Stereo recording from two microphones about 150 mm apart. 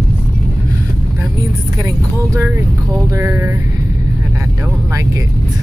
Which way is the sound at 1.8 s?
15° right (ahead or behind).